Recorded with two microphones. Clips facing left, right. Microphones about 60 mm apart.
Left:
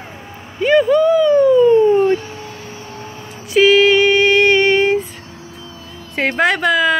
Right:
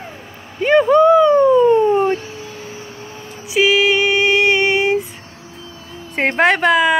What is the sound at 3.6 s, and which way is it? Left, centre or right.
Female singing, centre.